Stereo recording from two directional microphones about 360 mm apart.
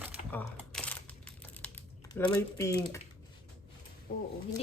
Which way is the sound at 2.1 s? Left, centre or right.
Centre.